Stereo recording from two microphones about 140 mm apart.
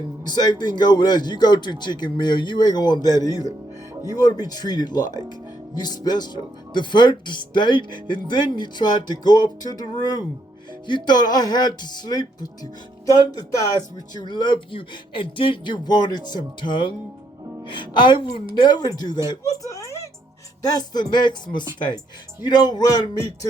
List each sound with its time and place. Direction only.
0.3 s speech: 30° left (ahead or behind)